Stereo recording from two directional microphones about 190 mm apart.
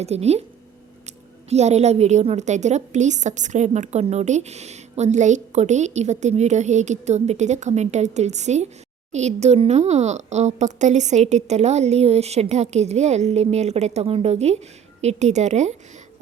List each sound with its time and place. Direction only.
0.0 s a woman's voice: 35° right (ahead or behind)
1.5 s a woman's voice: 35° right (ahead or behind)